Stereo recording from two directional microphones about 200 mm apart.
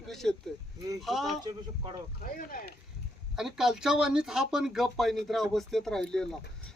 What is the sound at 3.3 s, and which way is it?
Speech, centre (ahead or behind).